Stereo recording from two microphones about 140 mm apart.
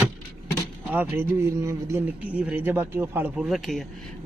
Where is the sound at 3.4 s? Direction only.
Centre (ahead or behind).